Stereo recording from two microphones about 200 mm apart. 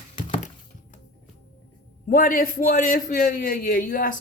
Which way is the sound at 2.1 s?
45° left (ahead or behind).